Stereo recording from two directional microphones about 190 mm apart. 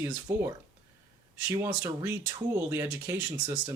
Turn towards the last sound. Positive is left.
turn(degrees=-10)  # may be behind; listen again after turning